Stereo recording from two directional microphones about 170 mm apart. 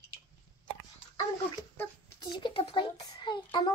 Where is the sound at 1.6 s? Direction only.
20° left (ahead or behind).